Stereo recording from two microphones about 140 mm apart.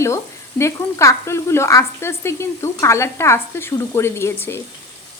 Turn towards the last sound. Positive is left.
turn(degrees=20)  # may be behind; listen again after turning